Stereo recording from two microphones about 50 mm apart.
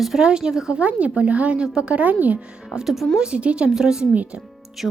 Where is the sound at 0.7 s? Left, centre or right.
Right.